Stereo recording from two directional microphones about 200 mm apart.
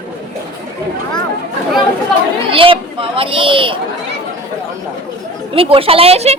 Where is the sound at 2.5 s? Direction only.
25° right (ahead or behind).